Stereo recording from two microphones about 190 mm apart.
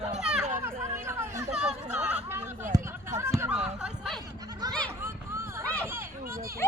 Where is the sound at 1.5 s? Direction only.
5° right (ahead or behind).